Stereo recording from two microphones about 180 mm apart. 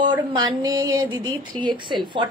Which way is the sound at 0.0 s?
25° right (ahead or behind).